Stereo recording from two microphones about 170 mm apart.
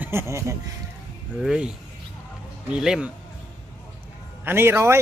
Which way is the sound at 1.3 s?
5° right (ahead or behind).